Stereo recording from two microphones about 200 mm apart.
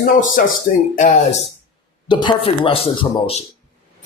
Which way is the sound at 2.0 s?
25° left (ahead or behind).